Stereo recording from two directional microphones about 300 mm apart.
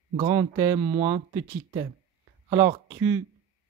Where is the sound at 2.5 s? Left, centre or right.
Centre.